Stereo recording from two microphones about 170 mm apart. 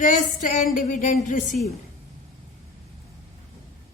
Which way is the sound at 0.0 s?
50° left (ahead or behind).